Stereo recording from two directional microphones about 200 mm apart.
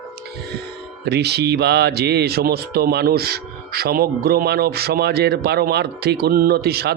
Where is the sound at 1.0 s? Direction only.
55° right (ahead or behind).